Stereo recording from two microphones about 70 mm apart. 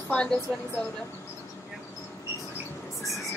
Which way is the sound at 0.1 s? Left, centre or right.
Centre.